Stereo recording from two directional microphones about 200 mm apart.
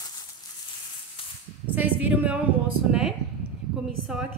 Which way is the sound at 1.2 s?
25° left (ahead or behind).